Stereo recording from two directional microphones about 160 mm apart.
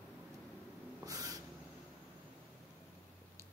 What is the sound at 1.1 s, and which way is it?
Owl, 20° right (ahead or behind).